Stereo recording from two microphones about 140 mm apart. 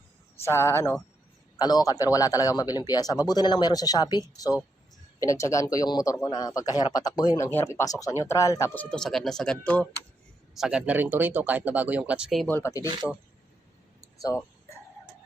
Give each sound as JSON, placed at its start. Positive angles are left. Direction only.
{"t": 0.3, "sound": "speech", "side_deg": 20}
{"t": 8.7, "sound": "speech", "side_deg": 10}
{"t": 10.5, "sound": "speech", "side_deg": -5}
{"t": 12.5, "sound": "speech", "side_deg": 15}
{"t": 14.2, "sound": "speech", "side_deg": 25}